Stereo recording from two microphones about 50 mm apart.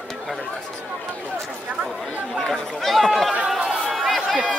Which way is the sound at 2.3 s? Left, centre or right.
Centre.